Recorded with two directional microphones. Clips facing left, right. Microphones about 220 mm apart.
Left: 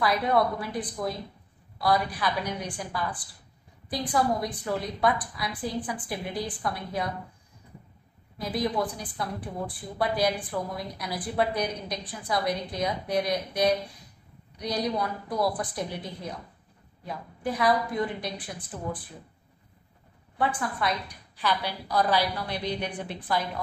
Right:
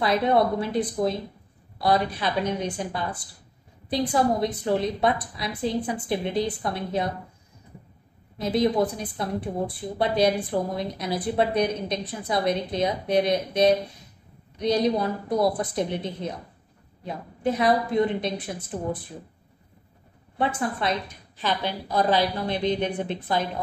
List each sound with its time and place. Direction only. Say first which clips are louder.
0.0 s a woman's voice: right 3 dB; 25° right (ahead or behind)
8.4 s a woman's voice: right 6 dB; 25° right (ahead or behind)
20.3 s a woman's voice: right 3 dB; 25° right (ahead or behind)